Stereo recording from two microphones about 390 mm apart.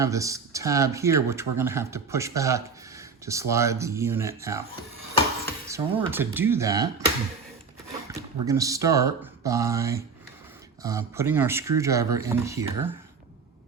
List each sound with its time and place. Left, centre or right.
0.0 s speech: centre
5.6 s speech: centre
8.1 s speech: centre